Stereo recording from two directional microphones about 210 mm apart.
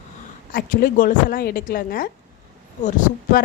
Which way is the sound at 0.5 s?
40° left (ahead or behind).